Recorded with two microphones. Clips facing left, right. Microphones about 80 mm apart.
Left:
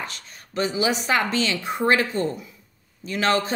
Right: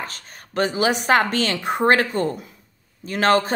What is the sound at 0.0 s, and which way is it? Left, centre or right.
A woman's voice, right.